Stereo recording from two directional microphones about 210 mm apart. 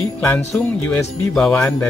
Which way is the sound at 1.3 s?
5° left (ahead or behind).